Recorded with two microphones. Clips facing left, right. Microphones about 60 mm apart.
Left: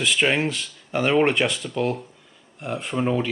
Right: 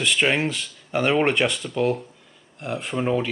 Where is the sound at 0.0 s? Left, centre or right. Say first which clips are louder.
Even; centre.